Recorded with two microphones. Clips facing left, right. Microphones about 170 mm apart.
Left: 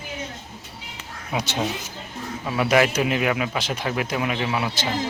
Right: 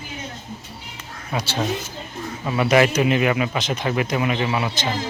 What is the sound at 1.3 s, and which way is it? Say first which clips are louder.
Speech: right 1 dB; 20° left (ahead or behind).